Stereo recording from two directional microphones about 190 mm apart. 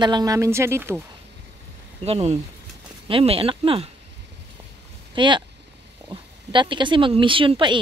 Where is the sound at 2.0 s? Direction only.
30° right (ahead or behind).